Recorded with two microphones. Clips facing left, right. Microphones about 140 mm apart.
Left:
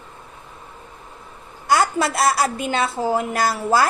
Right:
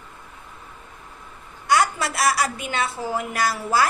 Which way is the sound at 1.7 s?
30° left (ahead or behind).